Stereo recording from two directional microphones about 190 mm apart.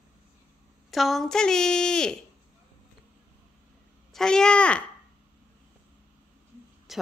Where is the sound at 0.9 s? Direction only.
Centre (ahead or behind).